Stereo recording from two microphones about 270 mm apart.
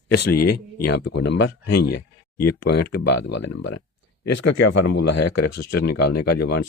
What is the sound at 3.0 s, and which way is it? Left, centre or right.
Speech, left.